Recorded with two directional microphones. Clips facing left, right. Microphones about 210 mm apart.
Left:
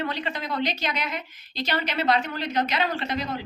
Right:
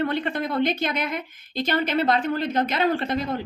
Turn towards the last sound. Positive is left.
turn(degrees=-50)  # may be behind; listen again after turning